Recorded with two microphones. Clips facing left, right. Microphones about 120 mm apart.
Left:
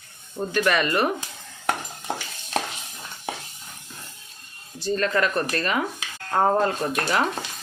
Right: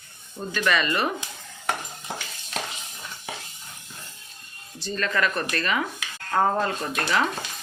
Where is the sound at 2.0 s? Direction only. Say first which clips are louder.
Left 4 dB; 45° left (ahead or behind).